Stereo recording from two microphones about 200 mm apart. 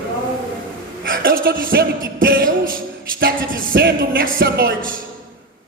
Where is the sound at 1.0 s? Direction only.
45° right (ahead or behind).